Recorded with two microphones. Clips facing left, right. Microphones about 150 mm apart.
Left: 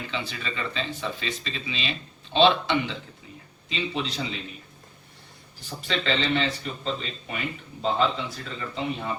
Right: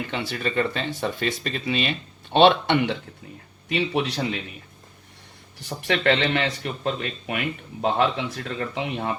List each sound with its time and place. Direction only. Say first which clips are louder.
0.1 s speech: right 6 dB; 55° right (ahead or behind)
5.5 s speech: right 5 dB; 70° right (ahead or behind)